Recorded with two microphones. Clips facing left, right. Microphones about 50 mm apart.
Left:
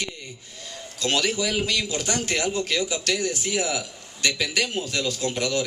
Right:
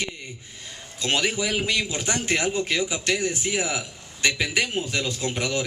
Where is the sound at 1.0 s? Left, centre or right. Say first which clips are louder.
Even; right.